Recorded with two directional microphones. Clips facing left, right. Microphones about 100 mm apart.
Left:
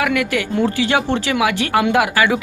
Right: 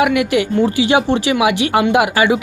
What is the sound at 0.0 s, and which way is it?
Speech, 15° right (ahead or behind).